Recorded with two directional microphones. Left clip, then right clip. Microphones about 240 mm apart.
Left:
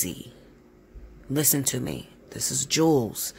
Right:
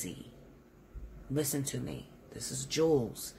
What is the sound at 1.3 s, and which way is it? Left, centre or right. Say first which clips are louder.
Speech: left 8 dB; left.